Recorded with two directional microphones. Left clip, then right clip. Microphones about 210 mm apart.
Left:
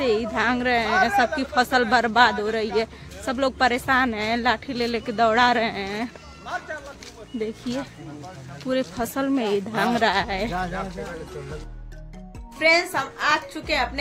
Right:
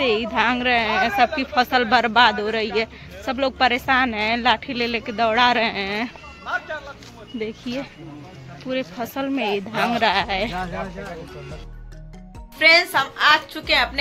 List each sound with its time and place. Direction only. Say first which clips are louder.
0.0 s speech: right 3 dB; 5° left (ahead or behind)
7.3 s speech: right 1 dB; 15° left (ahead or behind)
8.6 s speech: left 1 dB; 25° left (ahead or behind)
12.5 s speech: right 4 dB; 5° left (ahead or behind)